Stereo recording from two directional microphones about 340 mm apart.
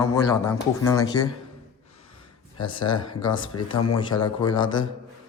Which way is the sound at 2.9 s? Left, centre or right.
Centre.